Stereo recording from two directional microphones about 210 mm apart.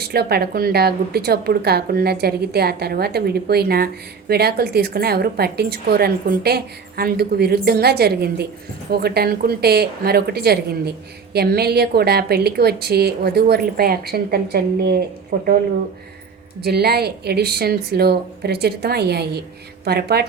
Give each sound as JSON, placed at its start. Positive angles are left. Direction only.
{"t": 0.0, "sound": "a woman's voice", "side_deg": -50}
{"t": 16.6, "sound": "a woman's voice", "side_deg": -50}